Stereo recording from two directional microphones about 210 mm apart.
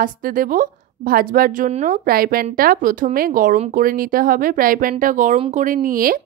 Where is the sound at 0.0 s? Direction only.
40° right (ahead or behind).